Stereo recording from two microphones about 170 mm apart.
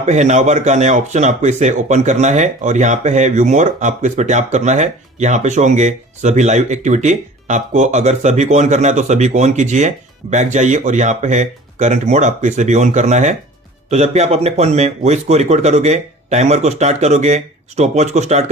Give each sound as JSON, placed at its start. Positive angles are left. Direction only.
{"t": 0.0, "sound": "speech", "side_deg": -45}